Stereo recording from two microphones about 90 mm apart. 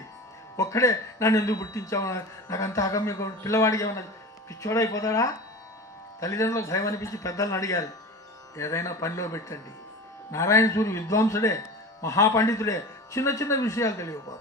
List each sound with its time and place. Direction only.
0.5 s speech: 35° left (ahead or behind)